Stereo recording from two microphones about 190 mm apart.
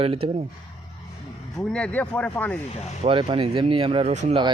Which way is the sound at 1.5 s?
5° left (ahead or behind).